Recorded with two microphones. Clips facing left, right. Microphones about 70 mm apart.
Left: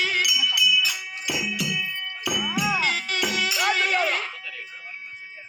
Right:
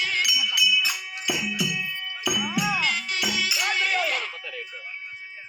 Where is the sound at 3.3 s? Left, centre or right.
Left.